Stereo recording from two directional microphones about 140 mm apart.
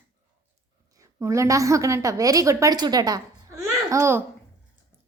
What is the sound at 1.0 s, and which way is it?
A woman's voice, 20° right (ahead or behind).